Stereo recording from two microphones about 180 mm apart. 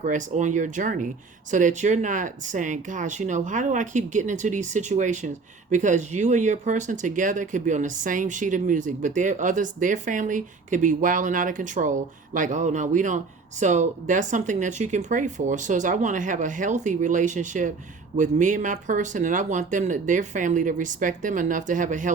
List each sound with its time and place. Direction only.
0.0 s speech: 45° right (ahead or behind)